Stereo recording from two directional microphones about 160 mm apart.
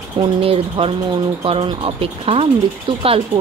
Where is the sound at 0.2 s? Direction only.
35° right (ahead or behind).